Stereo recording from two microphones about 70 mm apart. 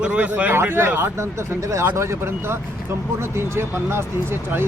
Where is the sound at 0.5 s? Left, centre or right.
Right.